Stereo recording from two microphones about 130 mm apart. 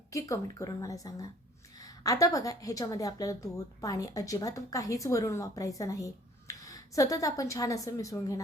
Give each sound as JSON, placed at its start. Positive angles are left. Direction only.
{"t": 0.1, "sound": "a woman's voice", "side_deg": 25}